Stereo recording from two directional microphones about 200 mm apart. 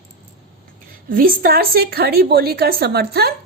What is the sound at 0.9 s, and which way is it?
A woman's voice, 45° right (ahead or behind).